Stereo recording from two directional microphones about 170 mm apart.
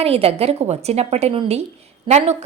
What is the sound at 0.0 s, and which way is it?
Speech, 35° right (ahead or behind).